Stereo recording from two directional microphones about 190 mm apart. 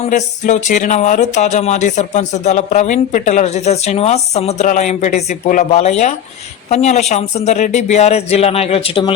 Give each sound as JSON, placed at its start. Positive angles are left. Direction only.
{"t": 0.0, "sound": "speech", "side_deg": 40}